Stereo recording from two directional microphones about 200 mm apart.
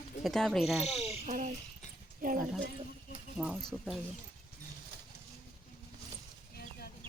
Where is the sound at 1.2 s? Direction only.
35° right (ahead or behind).